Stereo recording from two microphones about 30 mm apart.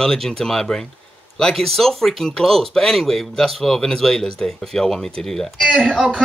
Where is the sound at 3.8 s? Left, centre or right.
Centre.